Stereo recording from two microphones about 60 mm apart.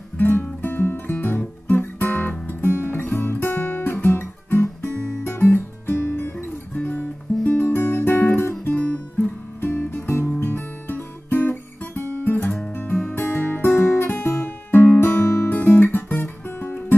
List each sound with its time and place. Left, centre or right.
0.2 s music: left
1.8 s guitar: left
2.4 s music: left
8.7 s music: left
10.4 s guitar: left
13.0 s music: left